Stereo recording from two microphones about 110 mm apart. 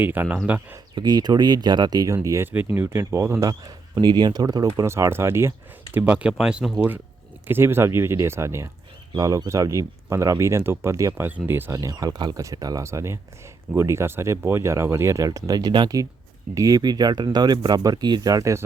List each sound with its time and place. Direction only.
0.0 s speech: 15° right (ahead or behind)
0.9 s speech: 40° right (ahead or behind)
2.1 s a man's voice: 25° right (ahead or behind)